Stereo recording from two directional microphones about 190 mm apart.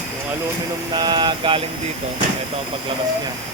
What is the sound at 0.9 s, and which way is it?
Mantra, 25° right (ahead or behind).